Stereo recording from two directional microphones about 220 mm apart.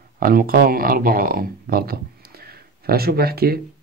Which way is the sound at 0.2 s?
40° right (ahead or behind).